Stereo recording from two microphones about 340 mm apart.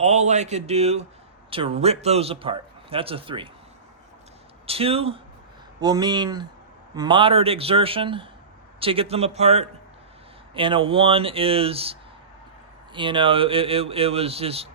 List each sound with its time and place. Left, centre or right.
0.0 s a man's voice: centre
4.6 s a man's voice: centre